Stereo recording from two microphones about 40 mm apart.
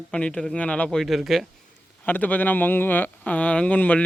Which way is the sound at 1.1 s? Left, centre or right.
Centre.